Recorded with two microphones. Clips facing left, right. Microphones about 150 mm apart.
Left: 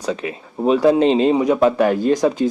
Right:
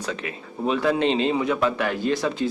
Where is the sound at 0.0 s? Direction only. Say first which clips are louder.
Left 6 dB; 35° left (ahead or behind).